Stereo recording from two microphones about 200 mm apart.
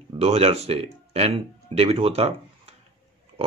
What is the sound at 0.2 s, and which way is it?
Speech, 30° right (ahead or behind).